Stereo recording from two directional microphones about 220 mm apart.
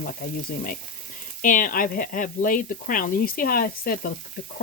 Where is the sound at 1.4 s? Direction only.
40° left (ahead or behind).